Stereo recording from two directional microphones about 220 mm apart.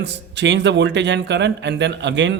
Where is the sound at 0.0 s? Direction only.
50° right (ahead or behind).